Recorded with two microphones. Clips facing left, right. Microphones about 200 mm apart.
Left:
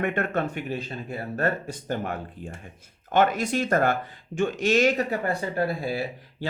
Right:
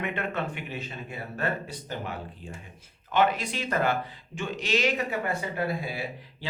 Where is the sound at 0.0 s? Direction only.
50° left (ahead or behind).